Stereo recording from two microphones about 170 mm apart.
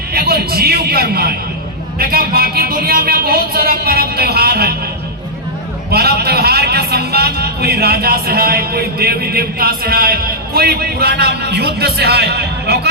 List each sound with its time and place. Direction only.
0.1 s a man's voice: 65° right (ahead or behind)
5.9 s a man's voice: 70° right (ahead or behind)